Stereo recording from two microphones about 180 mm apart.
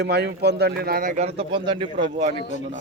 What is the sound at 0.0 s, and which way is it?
Speech, 65° right (ahead or behind).